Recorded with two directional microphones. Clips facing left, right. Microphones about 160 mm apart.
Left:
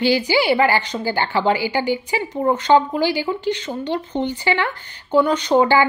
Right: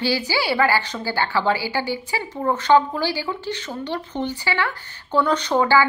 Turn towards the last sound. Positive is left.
turn(degrees=20)  # may be behind; listen again after turning